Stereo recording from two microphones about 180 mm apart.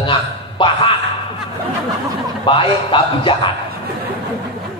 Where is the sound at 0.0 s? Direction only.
25° left (ahead or behind).